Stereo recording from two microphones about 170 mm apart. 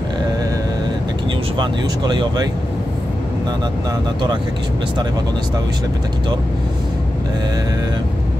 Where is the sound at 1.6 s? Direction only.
25° right (ahead or behind).